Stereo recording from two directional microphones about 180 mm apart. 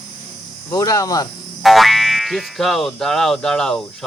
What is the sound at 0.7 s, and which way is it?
Speech, 20° left (ahead or behind).